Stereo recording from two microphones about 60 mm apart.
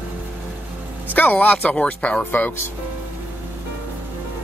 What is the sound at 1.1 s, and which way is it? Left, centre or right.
Speech, left.